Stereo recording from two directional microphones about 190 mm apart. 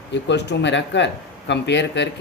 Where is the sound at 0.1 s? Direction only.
65° left (ahead or behind).